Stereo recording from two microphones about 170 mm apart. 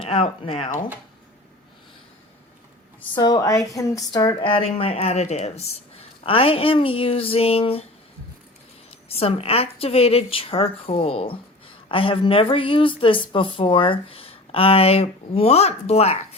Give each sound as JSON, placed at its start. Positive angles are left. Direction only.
{"t": 0.0, "sound": "a woman's voice", "side_deg": 35}
{"t": 3.2, "sound": "a woman's voice", "side_deg": 25}
{"t": 9.0, "sound": "a woman's voice", "side_deg": 35}